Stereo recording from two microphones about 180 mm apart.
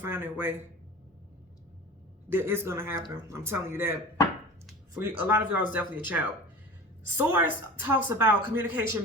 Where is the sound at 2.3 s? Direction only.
10° right (ahead or behind).